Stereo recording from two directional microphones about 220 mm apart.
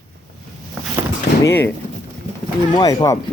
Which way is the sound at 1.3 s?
40° left (ahead or behind).